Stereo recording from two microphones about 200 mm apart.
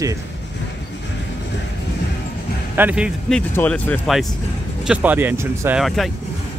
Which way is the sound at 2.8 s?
5° right (ahead or behind).